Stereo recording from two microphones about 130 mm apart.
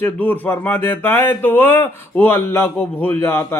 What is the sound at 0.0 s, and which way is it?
Speech, 15° left (ahead or behind).